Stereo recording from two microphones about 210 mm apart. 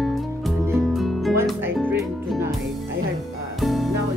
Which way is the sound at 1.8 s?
10° right (ahead or behind).